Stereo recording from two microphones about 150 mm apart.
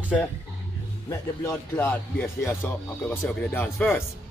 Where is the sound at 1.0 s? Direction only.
25° left (ahead or behind).